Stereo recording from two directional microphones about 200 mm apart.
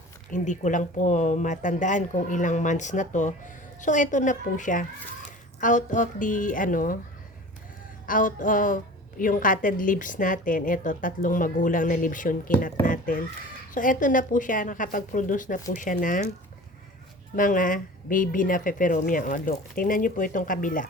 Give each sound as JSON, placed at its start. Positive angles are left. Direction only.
{"t": 0.3, "sound": "a woman's voice", "side_deg": 40}
{"t": 8.0, "sound": "a woman's voice", "side_deg": 40}
{"t": 17.3, "sound": "speech", "side_deg": 40}